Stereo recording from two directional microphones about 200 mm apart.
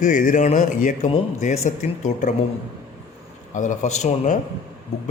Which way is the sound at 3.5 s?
40° left (ahead or behind).